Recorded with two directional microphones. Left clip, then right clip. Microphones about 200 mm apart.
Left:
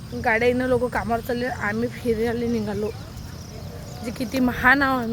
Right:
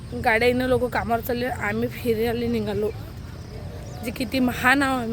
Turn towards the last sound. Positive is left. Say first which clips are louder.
# left 2 dB
turn(degrees=5)  # may be behind; listen again after turning